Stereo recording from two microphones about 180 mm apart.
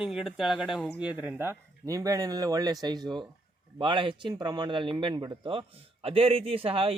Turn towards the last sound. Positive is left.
turn(degrees=-30)  # may be behind; listen again after turning